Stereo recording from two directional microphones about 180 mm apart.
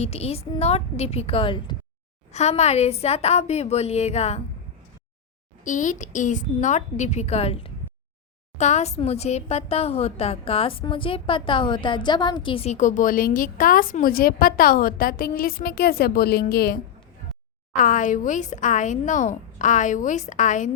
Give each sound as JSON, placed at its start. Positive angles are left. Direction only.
{"t": 0.0, "sound": "a woman's voice", "side_deg": 35}
{"t": 2.3, "sound": "a woman's voice", "side_deg": 40}
{"t": 5.6, "sound": "a woman's voice", "side_deg": 45}
{"t": 17.7, "sound": "speech", "side_deg": 45}